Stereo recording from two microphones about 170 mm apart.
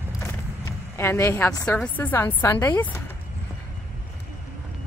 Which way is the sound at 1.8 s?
10° left (ahead or behind).